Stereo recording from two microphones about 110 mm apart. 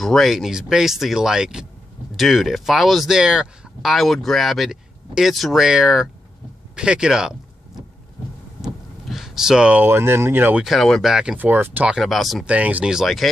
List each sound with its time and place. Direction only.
0.0 s speech: centre (ahead or behind)
9.1 s speech: 5° right (ahead or behind)
10.6 s speech: centre (ahead or behind)
11.3 s speech: 15° right (ahead or behind)
12.0 s speech: centre (ahead or behind)
12.4 s speech: 15° right (ahead or behind)